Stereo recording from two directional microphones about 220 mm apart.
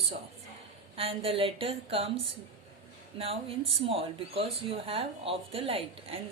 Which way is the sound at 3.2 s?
25° right (ahead or behind).